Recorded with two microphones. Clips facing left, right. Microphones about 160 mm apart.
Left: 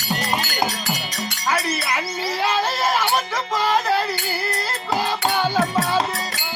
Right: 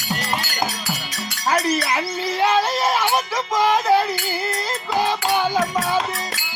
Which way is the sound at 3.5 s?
15° right (ahead or behind).